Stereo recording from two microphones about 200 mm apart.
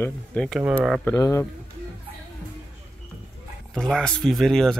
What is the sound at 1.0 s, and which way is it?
Speech, 15° left (ahead or behind).